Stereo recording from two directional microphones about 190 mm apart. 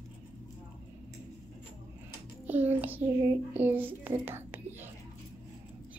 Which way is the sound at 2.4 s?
10° right (ahead or behind).